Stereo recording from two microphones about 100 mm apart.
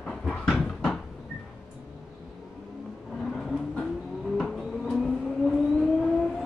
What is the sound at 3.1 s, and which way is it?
Vehicle, 5° left (ahead or behind).